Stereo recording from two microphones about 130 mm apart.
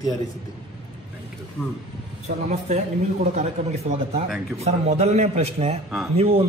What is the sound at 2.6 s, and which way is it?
Speech, 60° right (ahead or behind).